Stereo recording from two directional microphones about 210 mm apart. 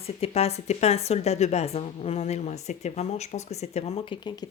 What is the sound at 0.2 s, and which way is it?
A woman's voice, 30° left (ahead or behind).